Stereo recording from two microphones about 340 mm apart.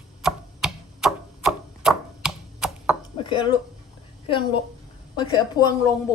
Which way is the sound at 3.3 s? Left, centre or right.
Centre.